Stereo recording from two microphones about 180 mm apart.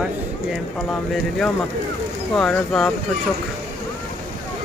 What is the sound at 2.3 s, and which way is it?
Speech, 5° left (ahead or behind).